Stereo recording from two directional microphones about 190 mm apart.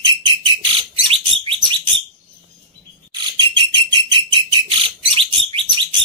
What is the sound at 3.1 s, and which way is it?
Bird, 25° right (ahead or behind).